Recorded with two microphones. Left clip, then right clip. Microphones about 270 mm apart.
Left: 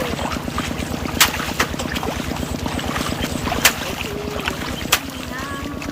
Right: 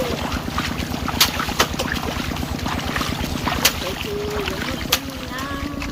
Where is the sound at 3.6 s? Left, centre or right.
Centre.